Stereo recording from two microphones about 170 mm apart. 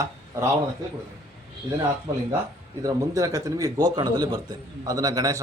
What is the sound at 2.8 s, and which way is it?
Speech, 20° right (ahead or behind).